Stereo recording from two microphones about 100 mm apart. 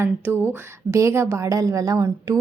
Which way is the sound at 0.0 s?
20° right (ahead or behind).